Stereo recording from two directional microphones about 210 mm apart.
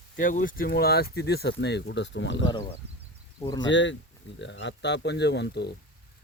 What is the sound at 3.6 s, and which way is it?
Speech, 60° left (ahead or behind).